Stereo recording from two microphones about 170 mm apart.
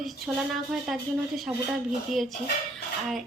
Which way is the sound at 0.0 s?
Centre (ahead or behind).